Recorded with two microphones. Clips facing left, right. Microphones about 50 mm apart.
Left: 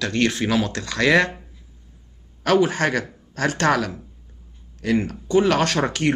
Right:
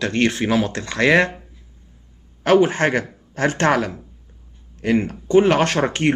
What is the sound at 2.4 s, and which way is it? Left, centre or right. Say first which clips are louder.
Speech: right 3 dB; right.